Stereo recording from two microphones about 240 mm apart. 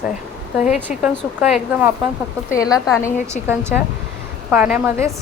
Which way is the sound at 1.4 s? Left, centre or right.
Centre.